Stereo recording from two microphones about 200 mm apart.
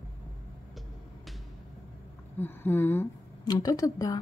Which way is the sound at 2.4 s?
10° left (ahead or behind).